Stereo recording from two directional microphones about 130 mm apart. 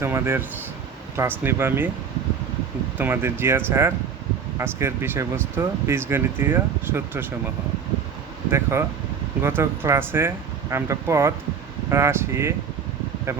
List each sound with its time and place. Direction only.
0.0 s speech: 20° right (ahead or behind)
3.0 s speech: 15° right (ahead or behind)